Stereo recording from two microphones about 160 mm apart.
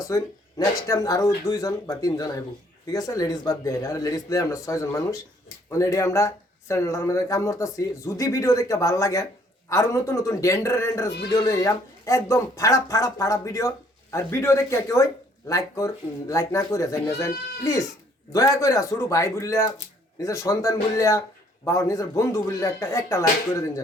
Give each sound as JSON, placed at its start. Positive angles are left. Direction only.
{"t": 0.0, "sound": "speech", "side_deg": 20}